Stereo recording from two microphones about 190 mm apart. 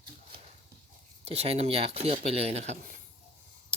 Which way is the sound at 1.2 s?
30° right (ahead or behind).